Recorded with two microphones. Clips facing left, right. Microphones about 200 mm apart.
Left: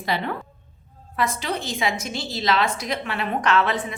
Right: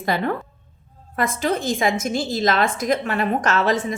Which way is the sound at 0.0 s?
45° right (ahead or behind).